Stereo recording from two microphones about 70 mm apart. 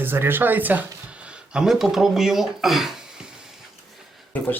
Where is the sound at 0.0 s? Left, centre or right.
Right.